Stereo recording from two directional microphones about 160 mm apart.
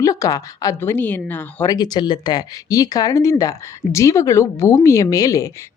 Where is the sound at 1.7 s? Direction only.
25° left (ahead or behind).